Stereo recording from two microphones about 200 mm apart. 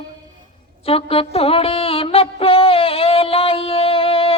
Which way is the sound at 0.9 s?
30° left (ahead or behind).